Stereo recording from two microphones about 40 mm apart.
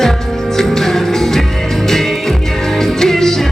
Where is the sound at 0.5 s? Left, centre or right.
Centre.